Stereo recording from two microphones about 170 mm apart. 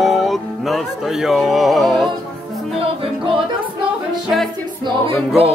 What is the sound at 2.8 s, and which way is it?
Music, 30° right (ahead or behind).